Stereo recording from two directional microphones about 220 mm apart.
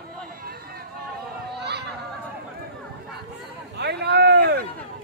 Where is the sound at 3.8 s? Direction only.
50° right (ahead or behind).